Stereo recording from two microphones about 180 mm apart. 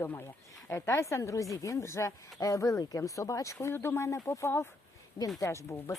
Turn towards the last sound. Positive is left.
turn(degrees=15)  # may be behind; listen again after turning